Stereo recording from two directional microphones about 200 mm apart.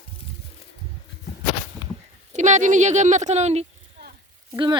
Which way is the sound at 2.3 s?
35° right (ahead or behind).